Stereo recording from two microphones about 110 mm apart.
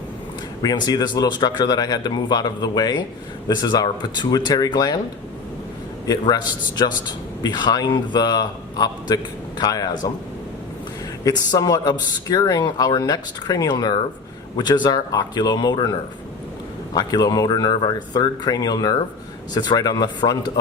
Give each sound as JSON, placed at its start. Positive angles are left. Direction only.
{"t": 0.6, "sound": "speech", "side_deg": 35}
{"t": 6.1, "sound": "speech", "side_deg": 40}
{"t": 11.2, "sound": "speech", "side_deg": 35}